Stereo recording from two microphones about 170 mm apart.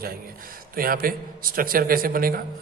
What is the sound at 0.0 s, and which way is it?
A man's voice, 60° right (ahead or behind).